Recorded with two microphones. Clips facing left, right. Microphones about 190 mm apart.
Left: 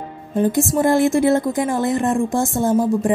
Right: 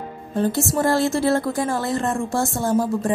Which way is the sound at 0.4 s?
15° left (ahead or behind).